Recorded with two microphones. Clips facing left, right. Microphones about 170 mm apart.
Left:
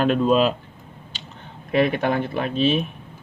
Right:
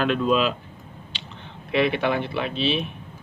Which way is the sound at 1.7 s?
45° left (ahead or behind).